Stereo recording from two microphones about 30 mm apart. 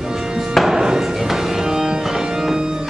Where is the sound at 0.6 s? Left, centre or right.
Right.